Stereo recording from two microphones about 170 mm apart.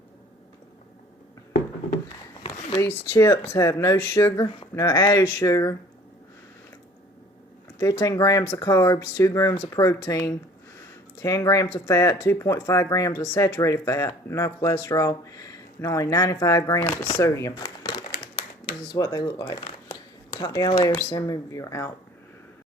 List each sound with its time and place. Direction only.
2.9 s speech: 15° left (ahead or behind)
7.8 s speech: 20° left (ahead or behind)